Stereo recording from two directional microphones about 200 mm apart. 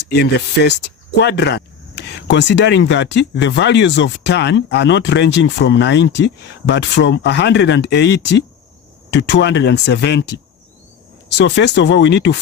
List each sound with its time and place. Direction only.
0.1 s speech: 55° left (ahead or behind)